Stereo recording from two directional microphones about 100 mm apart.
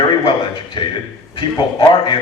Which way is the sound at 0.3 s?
60° left (ahead or behind).